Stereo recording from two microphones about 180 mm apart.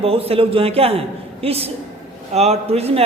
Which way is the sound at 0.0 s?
35° right (ahead or behind).